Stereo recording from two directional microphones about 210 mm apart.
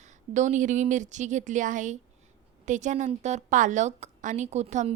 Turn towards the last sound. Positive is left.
turn(degrees=-35)  # may be behind; listen again after turning